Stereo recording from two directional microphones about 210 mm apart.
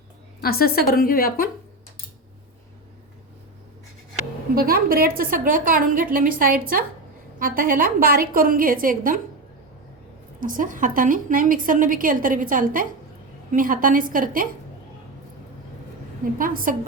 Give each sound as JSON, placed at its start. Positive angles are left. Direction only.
{"t": 0.4, "sound": "a woman's voice", "side_deg": 45}
{"t": 4.5, "sound": "a woman's voice", "side_deg": -45}
{"t": 10.4, "sound": "a woman's voice", "side_deg": -40}
{"t": 16.4, "sound": "a woman's voice", "side_deg": -40}